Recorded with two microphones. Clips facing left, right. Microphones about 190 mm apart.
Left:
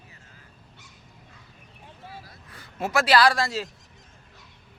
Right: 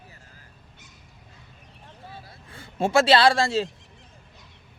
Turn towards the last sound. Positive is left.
turn(degrees=-25)  # may be behind; listen again after turning